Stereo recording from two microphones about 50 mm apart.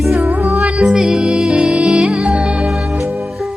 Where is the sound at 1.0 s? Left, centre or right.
Centre.